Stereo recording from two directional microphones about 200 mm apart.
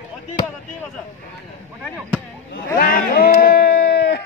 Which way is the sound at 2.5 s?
45° left (ahead or behind).